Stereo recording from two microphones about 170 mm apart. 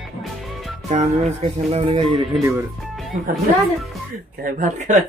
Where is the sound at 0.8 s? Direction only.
40° right (ahead or behind).